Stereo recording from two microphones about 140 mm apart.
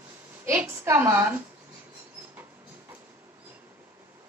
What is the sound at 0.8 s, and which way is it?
Speech, 20° right (ahead or behind).